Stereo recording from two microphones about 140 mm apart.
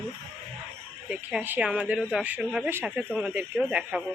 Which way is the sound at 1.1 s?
10° right (ahead or behind).